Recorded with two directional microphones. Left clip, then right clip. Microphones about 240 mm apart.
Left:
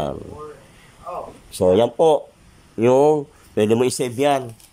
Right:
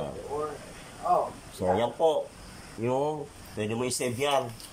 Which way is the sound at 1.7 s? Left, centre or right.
Left.